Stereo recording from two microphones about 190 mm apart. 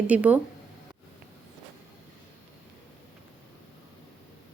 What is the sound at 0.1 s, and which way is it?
Speech, 10° right (ahead or behind).